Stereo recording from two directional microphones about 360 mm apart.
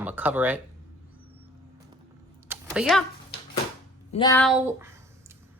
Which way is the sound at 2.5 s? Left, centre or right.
Centre.